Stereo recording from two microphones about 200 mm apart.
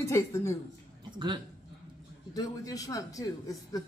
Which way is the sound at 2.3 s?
15° left (ahead or behind).